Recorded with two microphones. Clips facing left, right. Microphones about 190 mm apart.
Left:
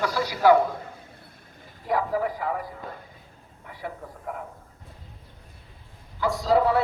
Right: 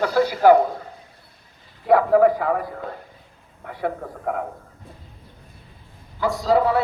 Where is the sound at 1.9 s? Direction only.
60° right (ahead or behind).